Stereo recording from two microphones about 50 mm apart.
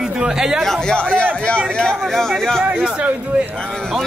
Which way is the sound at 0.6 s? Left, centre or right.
Centre.